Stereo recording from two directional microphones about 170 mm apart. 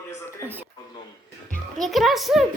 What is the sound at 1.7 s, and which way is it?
Speech, centre (ahead or behind).